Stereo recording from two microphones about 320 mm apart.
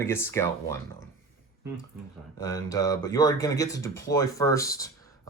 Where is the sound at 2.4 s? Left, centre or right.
Centre.